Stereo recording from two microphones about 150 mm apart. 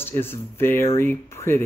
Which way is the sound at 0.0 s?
15° left (ahead or behind).